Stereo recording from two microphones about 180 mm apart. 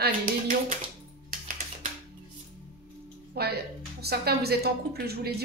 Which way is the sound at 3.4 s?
60° right (ahead or behind).